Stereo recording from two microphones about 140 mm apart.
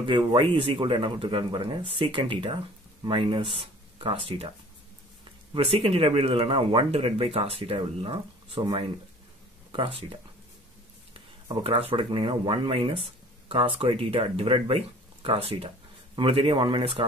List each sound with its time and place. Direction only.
0.0 s speech: 35° right (ahead or behind)
5.5 s speech: 40° right (ahead or behind)
11.4 s speech: 45° right (ahead or behind)